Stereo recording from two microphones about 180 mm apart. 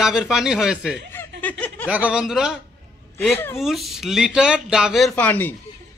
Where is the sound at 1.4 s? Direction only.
10° left (ahead or behind).